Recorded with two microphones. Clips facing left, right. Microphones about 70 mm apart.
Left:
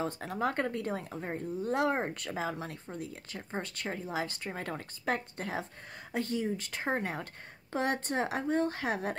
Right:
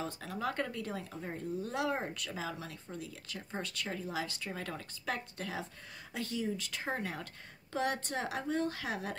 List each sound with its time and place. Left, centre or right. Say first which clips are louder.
0.0 s speech: left 5 dB; left